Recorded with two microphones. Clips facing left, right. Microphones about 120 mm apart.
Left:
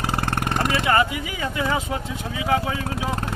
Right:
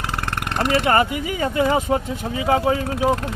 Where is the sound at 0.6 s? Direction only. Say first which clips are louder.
Right 4 dB; 50° right (ahead or behind).